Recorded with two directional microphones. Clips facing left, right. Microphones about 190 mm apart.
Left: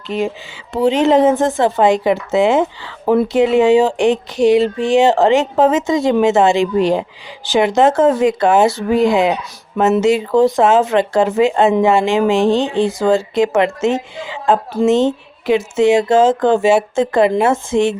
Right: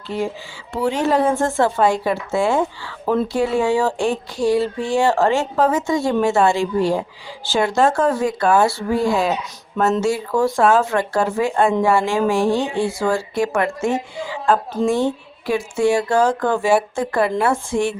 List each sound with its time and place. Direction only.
0.1 s speech: 20° left (ahead or behind)